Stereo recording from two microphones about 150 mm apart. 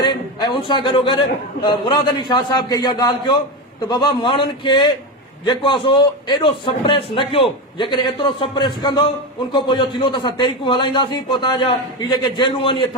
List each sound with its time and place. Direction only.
0.0 s a man's voice: 30° left (ahead or behind)